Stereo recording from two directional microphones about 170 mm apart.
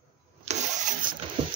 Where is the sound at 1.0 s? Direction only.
55° right (ahead or behind).